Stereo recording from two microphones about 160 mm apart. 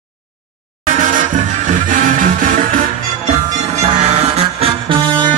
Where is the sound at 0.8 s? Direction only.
55° right (ahead or behind).